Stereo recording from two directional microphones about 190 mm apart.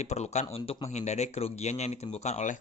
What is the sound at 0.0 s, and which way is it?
A man's voice, 35° left (ahead or behind).